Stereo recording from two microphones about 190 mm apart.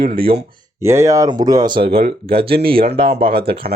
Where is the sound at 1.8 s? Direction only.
50° right (ahead or behind).